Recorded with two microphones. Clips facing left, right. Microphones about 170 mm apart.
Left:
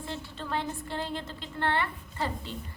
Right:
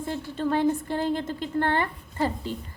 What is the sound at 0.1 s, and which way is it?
A woman's voice, 45° right (ahead or behind).